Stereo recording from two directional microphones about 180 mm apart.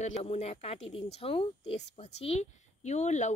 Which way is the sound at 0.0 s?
35° left (ahead or behind).